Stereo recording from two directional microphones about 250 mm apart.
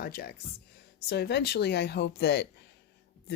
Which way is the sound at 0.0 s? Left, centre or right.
Left.